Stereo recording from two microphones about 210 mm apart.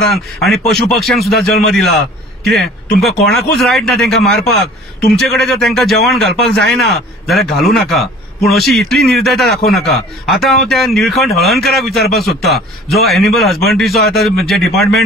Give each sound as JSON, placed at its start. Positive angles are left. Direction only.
{"t": 0.1, "sound": "a man's voice", "side_deg": 0}
{"t": 4.4, "sound": "a man's voice", "side_deg": 50}
{"t": 5.1, "sound": "a man's voice", "side_deg": 0}